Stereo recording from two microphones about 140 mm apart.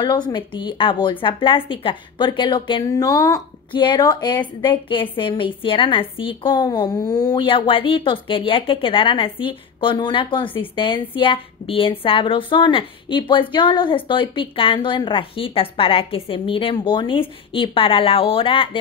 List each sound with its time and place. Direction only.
0.0 s a woman's voice: 30° left (ahead or behind)